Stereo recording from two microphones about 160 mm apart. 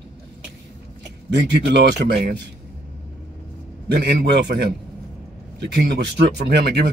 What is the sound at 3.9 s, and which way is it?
Speech, 90° right.